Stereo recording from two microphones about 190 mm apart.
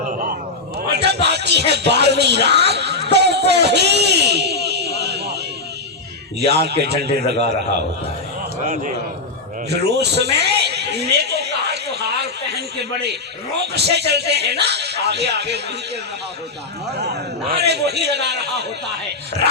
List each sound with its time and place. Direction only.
0.0 s a sound: 45° right (ahead or behind)
0.8 s speech: 60° right (ahead or behind)
6.5 s speech: 60° right (ahead or behind)
8.6 s a man's voice: 45° right (ahead or behind)
9.6 s a sound: 60° right (ahead or behind)
13.7 s speech: 60° right (ahead or behind)
17.6 s speech: 60° right (ahead or behind)